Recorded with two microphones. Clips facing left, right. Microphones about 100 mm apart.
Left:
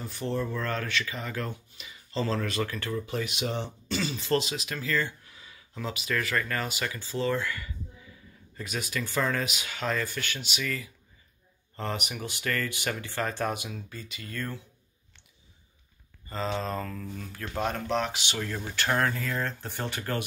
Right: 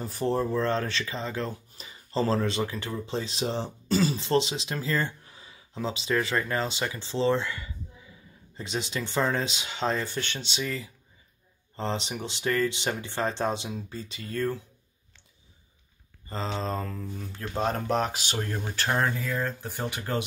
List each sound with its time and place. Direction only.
0.0 s speech: 40° right (ahead or behind)
1.5 s speech: 40° right (ahead or behind)
2.5 s speech: 20° right (ahead or behind)
4.3 s speech: 25° right (ahead or behind)
16.6 s speech: 25° right (ahead or behind)
18.9 s speech: 15° right (ahead or behind)
19.2 s speech: 5° right (ahead or behind)
19.9 s speech: 20° right (ahead or behind)